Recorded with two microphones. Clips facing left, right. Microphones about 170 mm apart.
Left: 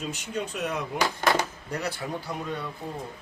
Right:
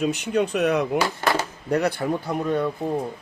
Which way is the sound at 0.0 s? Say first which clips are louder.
Right 10 dB; 70° right (ahead or behind).